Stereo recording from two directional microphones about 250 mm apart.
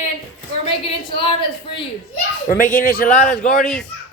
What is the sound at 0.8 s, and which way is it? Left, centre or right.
Speech, left.